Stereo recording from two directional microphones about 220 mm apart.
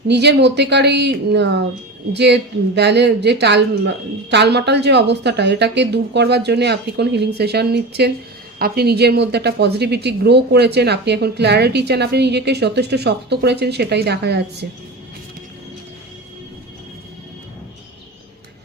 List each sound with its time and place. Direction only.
0.1 s a woman's voice: 50° right (ahead or behind)